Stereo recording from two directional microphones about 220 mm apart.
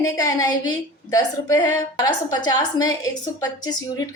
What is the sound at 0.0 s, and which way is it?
A woman's voice, 15° left (ahead or behind).